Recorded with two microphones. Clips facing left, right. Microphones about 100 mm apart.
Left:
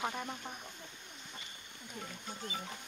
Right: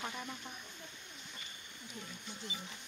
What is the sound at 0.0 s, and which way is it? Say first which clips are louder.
Speech: left 5 dB; 45° left (ahead or behind).